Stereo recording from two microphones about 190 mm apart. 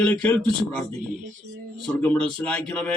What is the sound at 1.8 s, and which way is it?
Speech, 5° left (ahead or behind).